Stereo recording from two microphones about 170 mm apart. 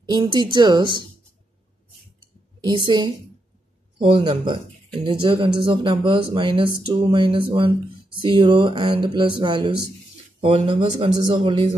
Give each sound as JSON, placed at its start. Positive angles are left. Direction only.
{"t": 0.1, "sound": "speech", "side_deg": -25}
{"t": 2.6, "sound": "speech", "side_deg": -25}